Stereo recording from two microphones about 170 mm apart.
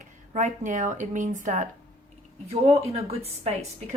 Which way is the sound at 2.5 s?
35° right (ahead or behind).